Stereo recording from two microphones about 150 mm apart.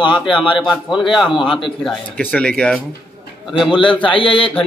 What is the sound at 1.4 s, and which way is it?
Speech, 35° left (ahead or behind).